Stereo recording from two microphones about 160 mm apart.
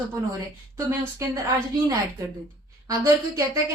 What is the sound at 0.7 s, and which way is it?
A woman's voice, 20° right (ahead or behind).